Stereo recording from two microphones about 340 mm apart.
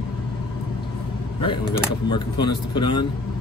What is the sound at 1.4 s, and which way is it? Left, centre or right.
Speech, centre.